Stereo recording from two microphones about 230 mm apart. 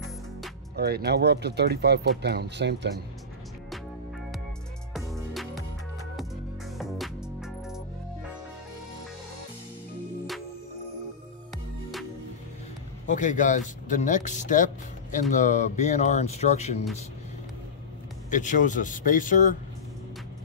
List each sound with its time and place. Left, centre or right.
0.7 s speech: right
4.9 s music: centre
13.0 s speech: left
18.3 s speech: left